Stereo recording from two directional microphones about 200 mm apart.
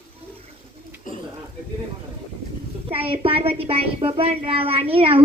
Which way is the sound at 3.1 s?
30° right (ahead or behind).